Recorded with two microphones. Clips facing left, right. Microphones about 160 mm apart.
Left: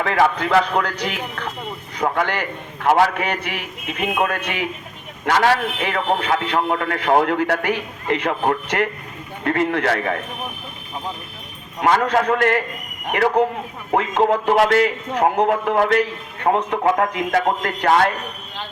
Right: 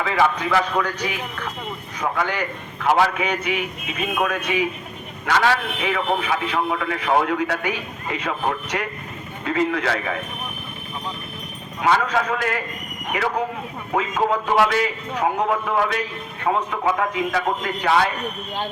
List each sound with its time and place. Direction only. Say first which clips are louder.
0.0 s a man's voice: left 2 dB; 60° left (ahead or behind)
2.7 s a man's voice: left 2 dB; 50° left (ahead or behind)
4.0 s speech: left 2 dB; 65° left (ahead or behind)
5.2 s a man's voice: left 3 dB; 55° left (ahead or behind)
11.8 s a man's voice: left 3 dB; 55° left (ahead or behind)